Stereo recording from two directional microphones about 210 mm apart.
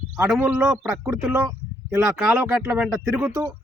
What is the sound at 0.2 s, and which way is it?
A man's voice, 5° right (ahead or behind).